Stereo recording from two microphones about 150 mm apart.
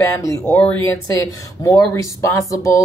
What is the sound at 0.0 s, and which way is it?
Speech, 20° left (ahead or behind).